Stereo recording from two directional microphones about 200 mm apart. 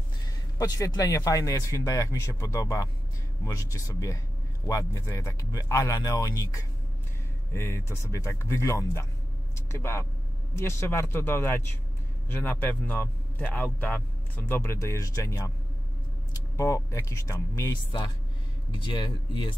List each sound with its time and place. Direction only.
0.6 s a man's voice: 15° left (ahead or behind)
7.5 s a man's voice: 10° left (ahead or behind)